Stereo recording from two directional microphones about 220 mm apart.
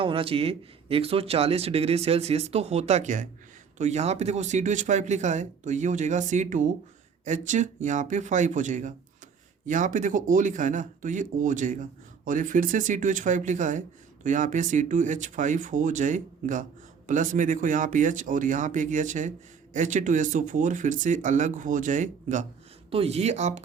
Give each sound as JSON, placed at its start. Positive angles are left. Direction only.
{"t": 0.0, "sound": "speech", "side_deg": -25}